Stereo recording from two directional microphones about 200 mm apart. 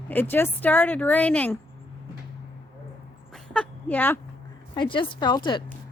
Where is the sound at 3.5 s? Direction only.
5° left (ahead or behind).